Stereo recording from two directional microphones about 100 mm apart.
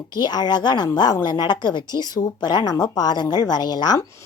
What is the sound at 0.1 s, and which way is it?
A woman's voice, 45° left (ahead or behind).